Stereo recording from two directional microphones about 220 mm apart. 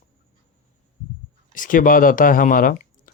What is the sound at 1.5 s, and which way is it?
Speech, 35° left (ahead or behind).